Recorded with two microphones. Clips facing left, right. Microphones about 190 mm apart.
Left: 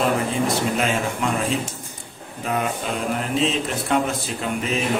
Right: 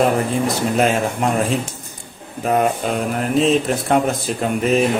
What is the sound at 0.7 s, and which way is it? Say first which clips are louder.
Speech: right 5 dB; 45° right (ahead or behind).